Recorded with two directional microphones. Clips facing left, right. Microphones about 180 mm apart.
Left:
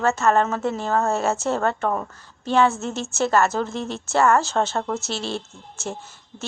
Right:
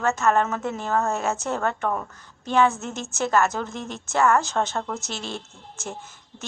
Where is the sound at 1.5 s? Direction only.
20° left (ahead or behind).